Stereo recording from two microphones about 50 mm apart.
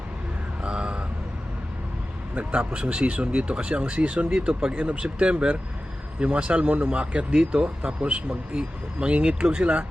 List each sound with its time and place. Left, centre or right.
0.6 s a sound: centre
2.3 s speech: right
2.6 s speech: centre